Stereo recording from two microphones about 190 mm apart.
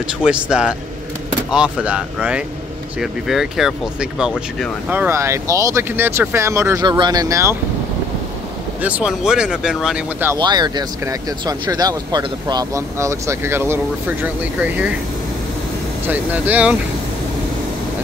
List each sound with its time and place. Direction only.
0.0 s speech: 5° right (ahead or behind)
8.8 s speech: 5° right (ahead or behind)
10.3 s speech: 20° right (ahead or behind)
16.1 s speech: 10° right (ahead or behind)